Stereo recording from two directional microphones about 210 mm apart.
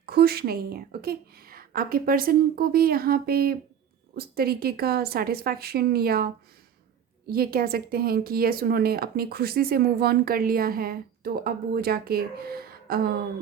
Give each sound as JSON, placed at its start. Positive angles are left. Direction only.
{"t": 0.0, "sound": "a woman's voice", "side_deg": -45}